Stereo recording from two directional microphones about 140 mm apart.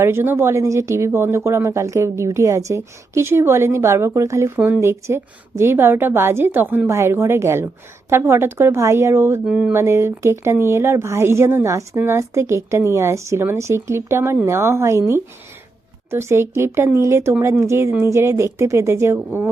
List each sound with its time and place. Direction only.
0.0 s speech: 15° right (ahead or behind)
9.5 s speech: 5° right (ahead or behind)
9.7 s speech: 20° right (ahead or behind)